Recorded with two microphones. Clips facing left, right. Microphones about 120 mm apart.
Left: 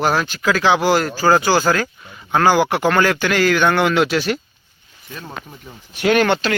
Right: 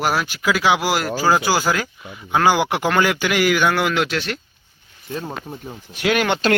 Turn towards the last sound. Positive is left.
turn(degrees=0)  # may be behind; listen again after turning